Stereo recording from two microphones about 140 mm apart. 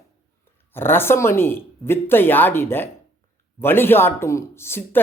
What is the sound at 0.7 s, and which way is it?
Speech, 15° left (ahead or behind).